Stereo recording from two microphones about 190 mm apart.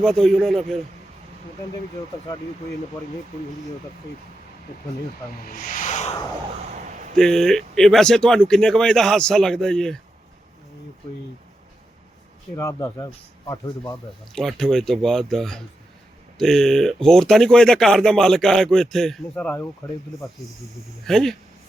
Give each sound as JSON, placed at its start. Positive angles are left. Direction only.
{"t": 0.0, "sound": "speech", "side_deg": 0}
{"t": 5.4, "sound": "a sound", "side_deg": 45}
{"t": 7.2, "sound": "speech", "side_deg": 0}
{"t": 12.5, "sound": "speech", "side_deg": 15}
{"t": 14.3, "sound": "speech", "side_deg": 0}
{"t": 21.0, "sound": "speech", "side_deg": 0}